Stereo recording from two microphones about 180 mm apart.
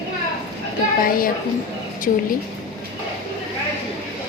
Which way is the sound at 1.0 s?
50° left (ahead or behind).